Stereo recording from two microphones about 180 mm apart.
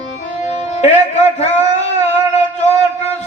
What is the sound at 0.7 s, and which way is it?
Speech, 35° left (ahead or behind).